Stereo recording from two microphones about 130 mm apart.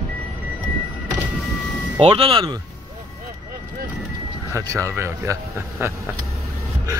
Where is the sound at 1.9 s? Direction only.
45° right (ahead or behind).